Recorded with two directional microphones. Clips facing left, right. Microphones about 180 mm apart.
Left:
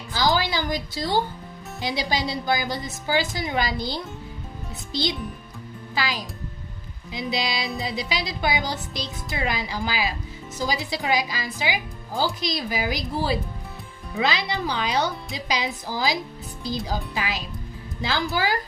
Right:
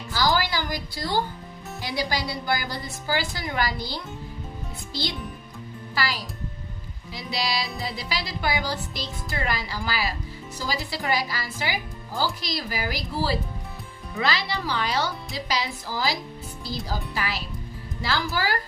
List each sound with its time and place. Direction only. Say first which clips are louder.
0.1 s a woman's voice: left 1 dB; 20° left (ahead or behind)